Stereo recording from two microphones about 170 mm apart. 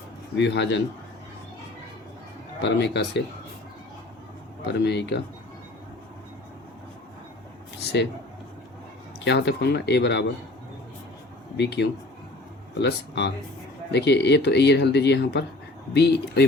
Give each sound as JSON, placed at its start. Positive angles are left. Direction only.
{"t": 0.3, "sound": "speech", "side_deg": 90}
{"t": 2.6, "sound": "speech", "side_deg": 85}
{"t": 4.7, "sound": "speech", "side_deg": 80}
{"t": 9.2, "sound": "speech", "side_deg": 90}
{"t": 11.5, "sound": "speech", "side_deg": 90}